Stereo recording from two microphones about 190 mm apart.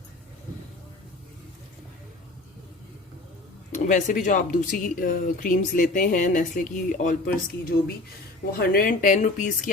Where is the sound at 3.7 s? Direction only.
45° left (ahead or behind).